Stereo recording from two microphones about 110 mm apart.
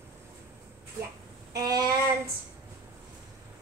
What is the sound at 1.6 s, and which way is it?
Child singing, 35° right (ahead or behind).